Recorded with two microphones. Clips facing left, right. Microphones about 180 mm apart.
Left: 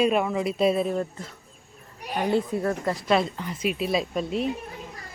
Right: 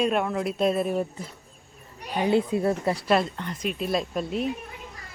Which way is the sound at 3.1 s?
Centre (ahead or behind).